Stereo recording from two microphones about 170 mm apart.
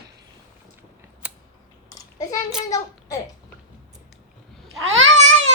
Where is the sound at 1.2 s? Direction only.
10° right (ahead or behind).